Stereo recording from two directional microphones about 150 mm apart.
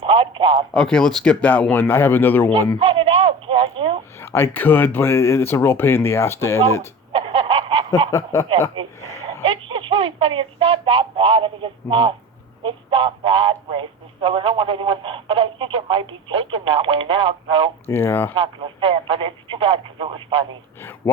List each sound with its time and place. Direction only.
0.0 s radio: 40° right (ahead or behind)
0.7 s speech: 5° left (ahead or behind)
2.7 s radio: 35° right (ahead or behind)
4.2 s speech: 15° left (ahead or behind)
7.1 s a sound: 40° right (ahead or behind)
8.1 s speech: 20° left (ahead or behind)
8.8 s a sound: 35° right (ahead or behind)
12.6 s speech: 35° right (ahead or behind)
17.8 s speech: 15° left (ahead or behind)
18.3 s speech: 35° right (ahead or behind)